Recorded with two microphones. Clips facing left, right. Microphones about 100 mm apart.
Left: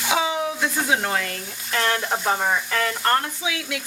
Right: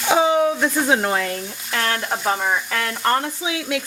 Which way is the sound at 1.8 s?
5° left (ahead or behind).